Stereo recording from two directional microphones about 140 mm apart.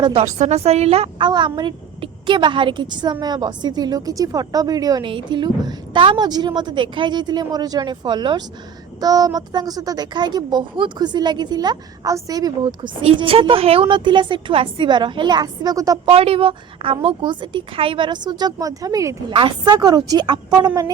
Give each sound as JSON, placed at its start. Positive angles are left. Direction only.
{"t": 0.0, "sound": "a woman's voice", "side_deg": -40}
{"t": 0.3, "sound": "a woman's voice", "side_deg": -55}
{"t": 1.3, "sound": "a woman's voice", "side_deg": -35}
{"t": 16.0, "sound": "a woman's voice", "side_deg": -45}
{"t": 19.3, "sound": "a woman's voice", "side_deg": -40}